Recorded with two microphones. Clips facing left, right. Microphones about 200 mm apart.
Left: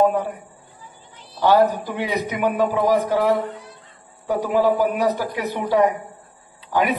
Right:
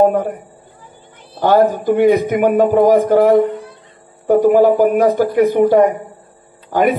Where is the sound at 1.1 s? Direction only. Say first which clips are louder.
Right 4 dB; 50° right (ahead or behind).